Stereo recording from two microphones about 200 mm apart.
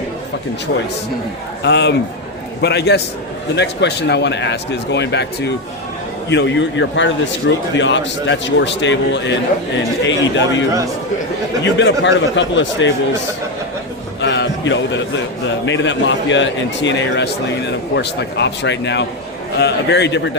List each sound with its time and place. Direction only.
1.6 s a man's voice: 60° left (ahead or behind)
14.2 s a man's voice: 60° left (ahead or behind)